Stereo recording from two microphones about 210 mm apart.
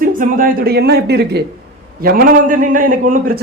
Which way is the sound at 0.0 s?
40° right (ahead or behind).